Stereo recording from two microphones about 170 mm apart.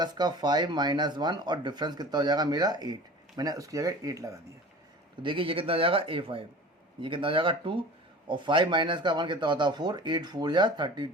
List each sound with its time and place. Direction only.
0.0 s speech: 25° right (ahead or behind)
5.2 s speech: 30° right (ahead or behind)